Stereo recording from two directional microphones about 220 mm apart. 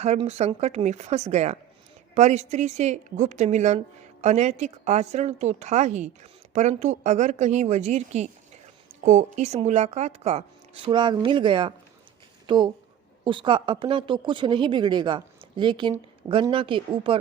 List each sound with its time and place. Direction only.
0.0 s a woman's voice: 30° right (ahead or behind)